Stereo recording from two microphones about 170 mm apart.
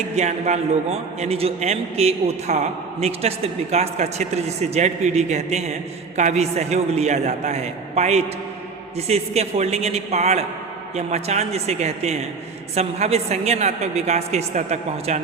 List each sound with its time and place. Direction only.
0.2 s a man's voice: 45° right (ahead or behind)